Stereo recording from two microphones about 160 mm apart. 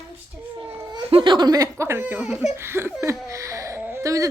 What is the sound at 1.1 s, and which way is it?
Speech, 30° right (ahead or behind).